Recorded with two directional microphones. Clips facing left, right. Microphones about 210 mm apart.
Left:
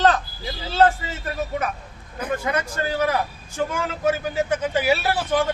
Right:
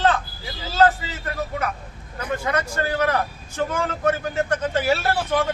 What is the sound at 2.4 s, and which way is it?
A man's voice, 15° left (ahead or behind).